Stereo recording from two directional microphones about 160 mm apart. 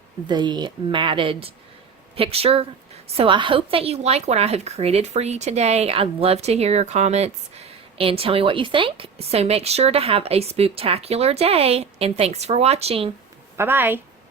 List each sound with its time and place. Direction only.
0.3 s a woman's voice: 30° right (ahead or behind)
13.6 s a woman's voice: 15° right (ahead or behind)